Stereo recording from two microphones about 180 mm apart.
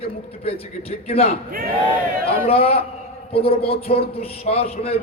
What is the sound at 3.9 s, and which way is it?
A man's voice, 35° left (ahead or behind).